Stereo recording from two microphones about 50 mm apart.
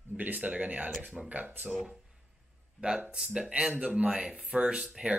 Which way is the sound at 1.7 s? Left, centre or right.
Centre.